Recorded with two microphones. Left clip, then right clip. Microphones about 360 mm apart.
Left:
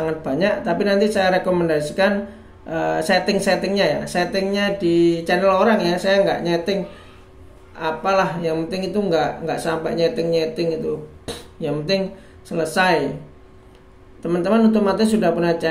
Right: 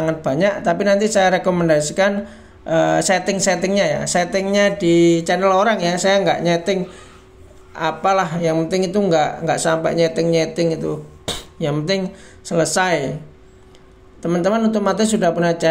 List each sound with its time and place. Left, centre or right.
0.0 s speech: right
11.2 s a sound: right
12.4 s speech: right
14.2 s speech: right